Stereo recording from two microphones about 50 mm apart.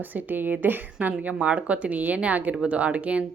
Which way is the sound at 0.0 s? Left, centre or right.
Right.